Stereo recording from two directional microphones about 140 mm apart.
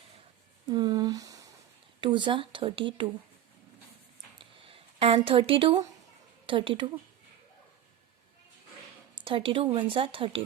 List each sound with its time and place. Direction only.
0.7 s a sound: 30° right (ahead or behind)
2.0 s a woman's voice: 35° right (ahead or behind)
4.6 s a woman's voice: 40° right (ahead or behind)
9.1 s a woman's voice: 40° right (ahead or behind)